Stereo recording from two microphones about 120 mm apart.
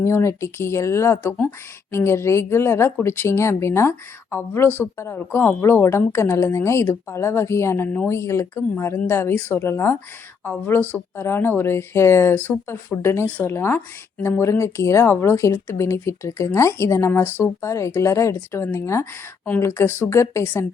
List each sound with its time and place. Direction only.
0.0 s speech: 20° left (ahead or behind)